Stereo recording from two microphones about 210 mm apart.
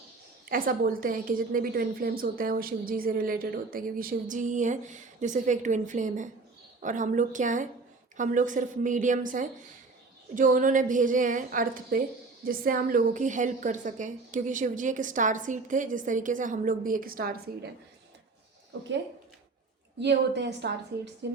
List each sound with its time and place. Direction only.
0.4 s a woman's voice: 40° right (ahead or behind)
20.0 s a woman's voice: 55° right (ahead or behind)